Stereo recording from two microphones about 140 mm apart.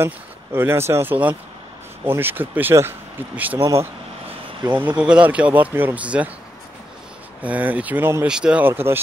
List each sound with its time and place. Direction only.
0.0 s speech: 15° right (ahead or behind)
7.4 s speech: 10° right (ahead or behind)